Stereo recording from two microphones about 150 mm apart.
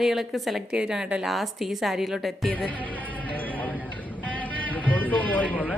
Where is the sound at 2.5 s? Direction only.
10° left (ahead or behind).